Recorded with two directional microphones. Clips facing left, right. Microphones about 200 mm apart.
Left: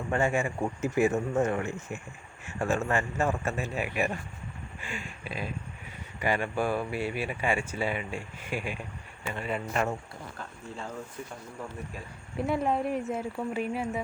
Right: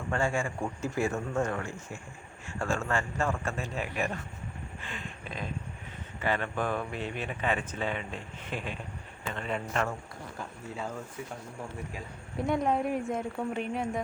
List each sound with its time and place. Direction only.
0.1 s speech: 20° left (ahead or behind)
12.5 s a woman's voice: 5° left (ahead or behind)